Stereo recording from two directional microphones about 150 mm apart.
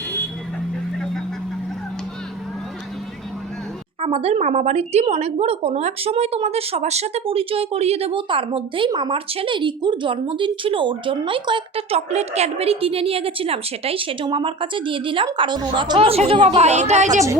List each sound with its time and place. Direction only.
4.0 s a woman's voice: 40° right (ahead or behind)
16.6 s a woman's voice: 45° right (ahead or behind)